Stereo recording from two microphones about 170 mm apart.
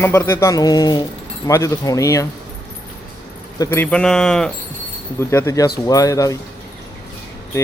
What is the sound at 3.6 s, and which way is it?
Speech, 15° left (ahead or behind).